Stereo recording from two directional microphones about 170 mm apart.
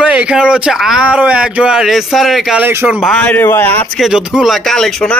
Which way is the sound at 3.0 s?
5° left (ahead or behind).